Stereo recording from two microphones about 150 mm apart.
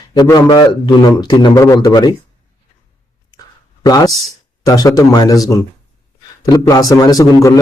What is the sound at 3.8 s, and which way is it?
A man's voice, 20° left (ahead or behind).